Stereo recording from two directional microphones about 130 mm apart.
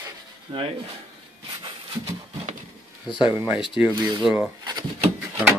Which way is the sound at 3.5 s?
5° right (ahead or behind).